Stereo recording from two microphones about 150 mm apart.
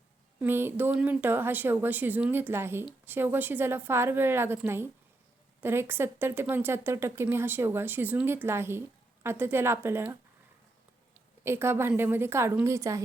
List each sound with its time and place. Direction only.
0.3 s speech: 15° right (ahead or behind)
11.4 s speech: 15° right (ahead or behind)